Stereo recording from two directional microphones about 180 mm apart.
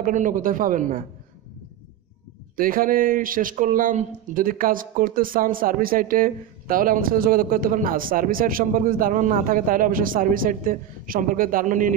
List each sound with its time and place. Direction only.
0.0 s a man's voice: 45° right (ahead or behind)
2.5 s a man's voice: 50° right (ahead or behind)